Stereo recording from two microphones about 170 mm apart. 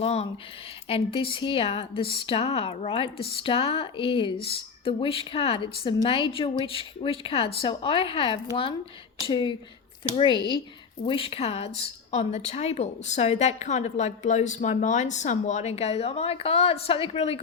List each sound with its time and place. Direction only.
0.0 s a woman's voice: 35° left (ahead or behind)